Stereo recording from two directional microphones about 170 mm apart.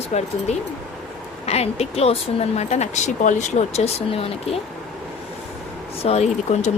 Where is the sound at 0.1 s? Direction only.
40° left (ahead or behind).